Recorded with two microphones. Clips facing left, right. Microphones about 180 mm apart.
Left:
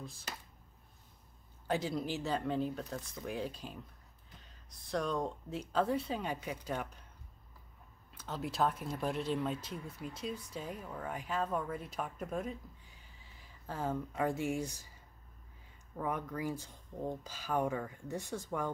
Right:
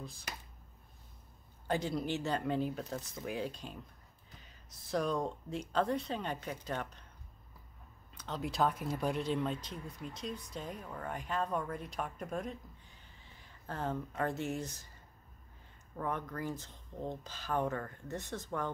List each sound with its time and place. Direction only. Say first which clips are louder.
1.7 s speech: right 1 dB; centre (ahead or behind)
8.1 s speech: right 1 dB; 5° left (ahead or behind)
16.0 s speech: left 1 dB; 10° left (ahead or behind)